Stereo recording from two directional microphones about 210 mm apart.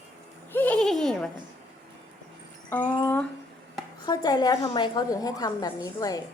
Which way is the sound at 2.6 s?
10° left (ahead or behind).